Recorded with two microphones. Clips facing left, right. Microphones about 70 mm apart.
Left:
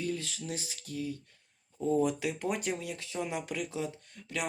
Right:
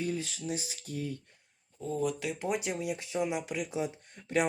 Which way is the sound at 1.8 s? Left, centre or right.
Centre.